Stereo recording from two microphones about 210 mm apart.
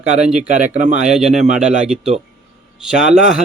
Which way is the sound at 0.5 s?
35° right (ahead or behind).